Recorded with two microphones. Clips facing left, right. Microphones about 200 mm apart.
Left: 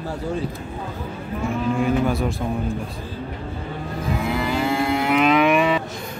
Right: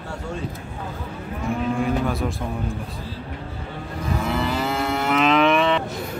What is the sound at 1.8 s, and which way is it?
Cattle, centre (ahead or behind).